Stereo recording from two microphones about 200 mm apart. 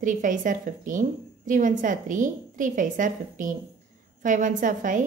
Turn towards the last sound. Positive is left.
turn(degrees=-40)  # may be behind; listen again after turning